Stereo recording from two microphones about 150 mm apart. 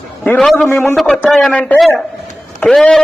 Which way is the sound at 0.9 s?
Centre (ahead or behind).